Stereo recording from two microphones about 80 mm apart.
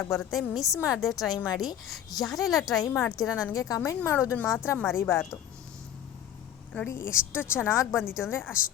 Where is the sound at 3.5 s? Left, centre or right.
Left.